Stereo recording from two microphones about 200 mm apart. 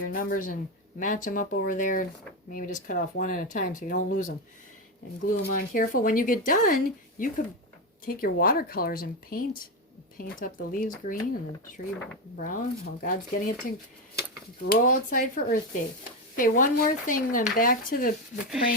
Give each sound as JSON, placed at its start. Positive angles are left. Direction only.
{"t": 0.1, "sound": "speech", "side_deg": 45}
{"t": 5.4, "sound": "speech", "side_deg": 45}
{"t": 12.4, "sound": "speech", "side_deg": 45}